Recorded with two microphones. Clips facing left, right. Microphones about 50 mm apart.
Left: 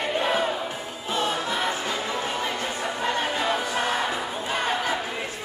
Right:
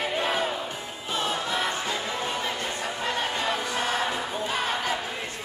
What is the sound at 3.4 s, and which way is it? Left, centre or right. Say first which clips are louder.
Crowd: left 2 dB; centre.